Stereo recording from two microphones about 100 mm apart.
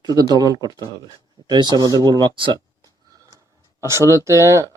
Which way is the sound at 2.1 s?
55° right (ahead or behind).